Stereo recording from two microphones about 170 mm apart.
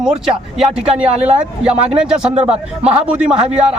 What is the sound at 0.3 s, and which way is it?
Speech, centre (ahead or behind).